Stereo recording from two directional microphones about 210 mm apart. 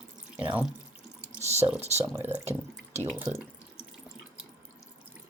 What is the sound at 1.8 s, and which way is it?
Speech, 30° right (ahead or behind).